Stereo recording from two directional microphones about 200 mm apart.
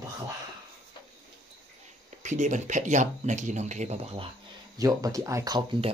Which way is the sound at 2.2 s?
40° right (ahead or behind).